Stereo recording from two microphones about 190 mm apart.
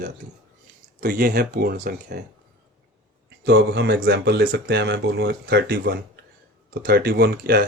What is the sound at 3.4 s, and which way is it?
Speech, 70° right (ahead or behind).